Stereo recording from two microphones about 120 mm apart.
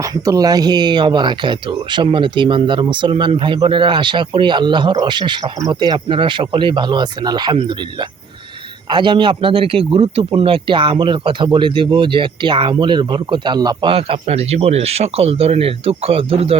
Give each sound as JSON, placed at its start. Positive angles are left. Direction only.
{"t": 0.0, "sound": "speech", "side_deg": -30}
{"t": 13.9, "sound": "speech", "side_deg": -55}